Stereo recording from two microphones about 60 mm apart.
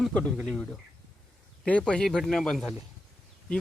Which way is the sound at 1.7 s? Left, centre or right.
Centre.